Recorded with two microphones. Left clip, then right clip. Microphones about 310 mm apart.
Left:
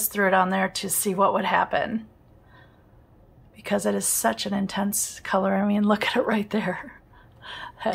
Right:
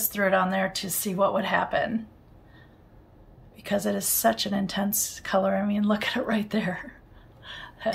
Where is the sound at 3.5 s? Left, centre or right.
Centre.